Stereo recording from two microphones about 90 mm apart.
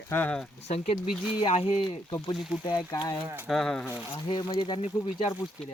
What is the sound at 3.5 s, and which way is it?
Speech, 5° left (ahead or behind).